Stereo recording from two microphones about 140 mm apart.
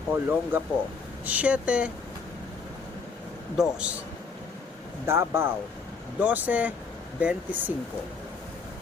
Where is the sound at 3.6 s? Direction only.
10° right (ahead or behind).